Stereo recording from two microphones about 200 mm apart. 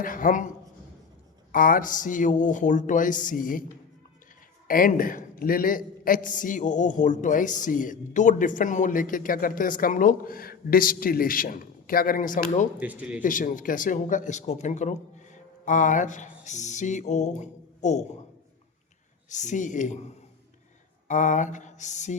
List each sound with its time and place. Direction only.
0.0 s a man's voice: 45° left (ahead or behind)
1.5 s speech: 45° left (ahead or behind)
4.7 s a man's voice: 45° left (ahead or behind)
12.8 s speech: 5° right (ahead or behind)
13.2 s speech: 40° left (ahead or behind)
19.3 s speech: 35° left (ahead or behind)
21.1 s speech: 40° left (ahead or behind)